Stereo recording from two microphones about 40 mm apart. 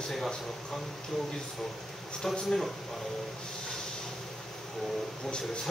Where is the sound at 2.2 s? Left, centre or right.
Centre.